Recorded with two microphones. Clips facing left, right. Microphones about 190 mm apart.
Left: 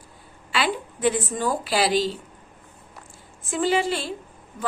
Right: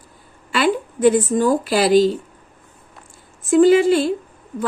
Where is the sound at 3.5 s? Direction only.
45° right (ahead or behind).